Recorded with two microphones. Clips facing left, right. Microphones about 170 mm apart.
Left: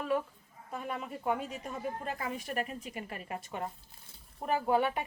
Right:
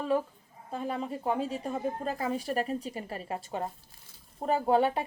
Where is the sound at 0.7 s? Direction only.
30° right (ahead or behind).